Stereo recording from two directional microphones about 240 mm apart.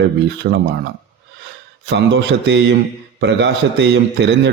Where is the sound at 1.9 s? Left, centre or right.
Right.